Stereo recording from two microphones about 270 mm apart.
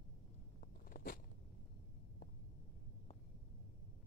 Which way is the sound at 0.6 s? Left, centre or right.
Left.